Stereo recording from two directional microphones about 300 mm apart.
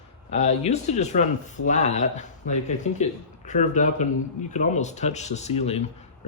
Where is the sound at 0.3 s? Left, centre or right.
Left.